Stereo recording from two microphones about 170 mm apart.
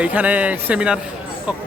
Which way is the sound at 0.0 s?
10° right (ahead or behind).